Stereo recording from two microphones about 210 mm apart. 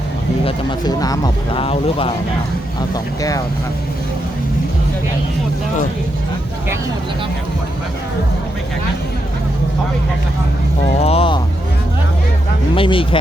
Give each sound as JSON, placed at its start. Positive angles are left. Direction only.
{"t": 0.4, "sound": "speech", "side_deg": 20}
{"t": 2.9, "sound": "speech", "side_deg": 15}
{"t": 11.0, "sound": "vehicle", "side_deg": 25}
{"t": 12.7, "sound": "speech", "side_deg": 25}